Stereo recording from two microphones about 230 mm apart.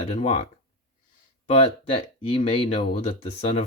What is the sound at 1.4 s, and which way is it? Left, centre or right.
Speech, left.